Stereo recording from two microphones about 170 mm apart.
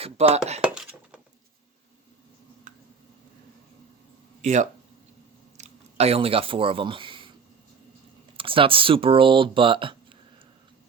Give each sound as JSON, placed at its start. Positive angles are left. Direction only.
{"t": 0.0, "sound": "dishes", "side_deg": -35}
{"t": 0.6, "sound": "dishes", "side_deg": -5}
{"t": 2.7, "sound": "tick", "side_deg": -50}
{"t": 4.4, "sound": "speech", "side_deg": -45}
{"t": 5.5, "sound": "a sound", "side_deg": -35}
{"t": 8.4, "sound": "speech", "side_deg": -30}